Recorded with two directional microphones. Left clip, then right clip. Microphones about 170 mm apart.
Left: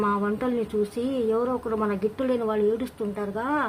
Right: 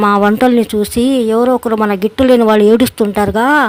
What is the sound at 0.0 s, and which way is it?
Speech, 55° right (ahead or behind).